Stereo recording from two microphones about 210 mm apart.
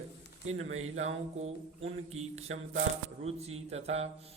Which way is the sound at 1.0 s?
30° right (ahead or behind).